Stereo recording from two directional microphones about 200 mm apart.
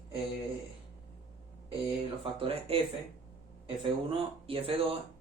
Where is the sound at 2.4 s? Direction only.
30° right (ahead or behind).